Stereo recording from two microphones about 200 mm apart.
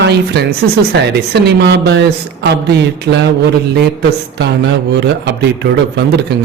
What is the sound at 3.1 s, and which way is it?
Speech, 55° right (ahead or behind).